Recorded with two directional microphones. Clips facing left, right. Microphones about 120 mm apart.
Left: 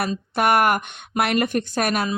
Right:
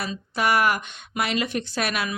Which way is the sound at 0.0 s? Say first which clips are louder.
Left 4 dB; 55° left (ahead or behind).